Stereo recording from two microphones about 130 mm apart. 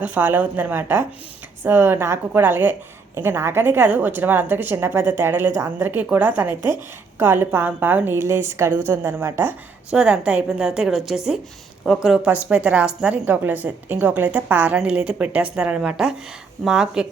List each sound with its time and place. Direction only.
0.0 s a woman's voice: 15° right (ahead or behind)
9.9 s a woman's voice: 5° right (ahead or behind)